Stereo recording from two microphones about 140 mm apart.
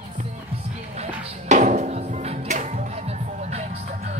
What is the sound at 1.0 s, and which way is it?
Music, 60° right (ahead or behind).